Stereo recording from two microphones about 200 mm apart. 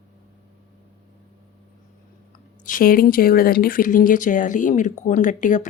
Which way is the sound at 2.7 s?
45° left (ahead or behind).